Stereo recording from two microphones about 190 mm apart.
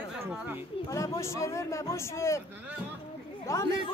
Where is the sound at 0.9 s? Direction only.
15° left (ahead or behind).